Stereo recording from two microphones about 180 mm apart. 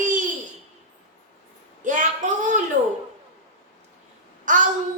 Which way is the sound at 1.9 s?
45° right (ahead or behind).